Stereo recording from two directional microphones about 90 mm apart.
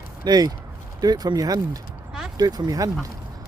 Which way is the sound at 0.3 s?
50° right (ahead or behind).